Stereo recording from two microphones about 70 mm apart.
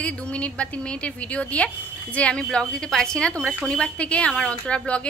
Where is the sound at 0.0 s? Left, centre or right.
Centre.